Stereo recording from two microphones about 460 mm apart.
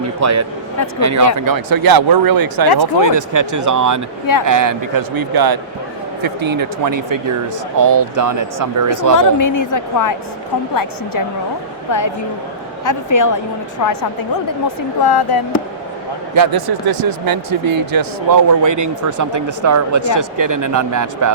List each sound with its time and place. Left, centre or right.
0.2 s speech: right
6.2 s speech: right
7.8 s speech: right
9.1 s a woman's voice: left
11.9 s a woman's voice: left
14.8 s speech: left
16.3 s speech: right